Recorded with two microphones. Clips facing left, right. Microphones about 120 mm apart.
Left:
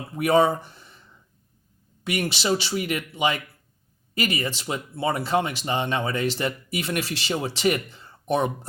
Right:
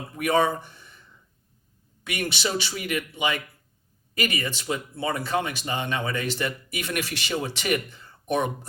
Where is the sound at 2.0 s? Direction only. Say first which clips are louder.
Left 4 dB; 30° left (ahead or behind).